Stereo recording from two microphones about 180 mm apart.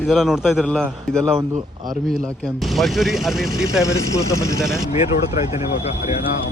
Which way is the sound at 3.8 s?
15° left (ahead or behind).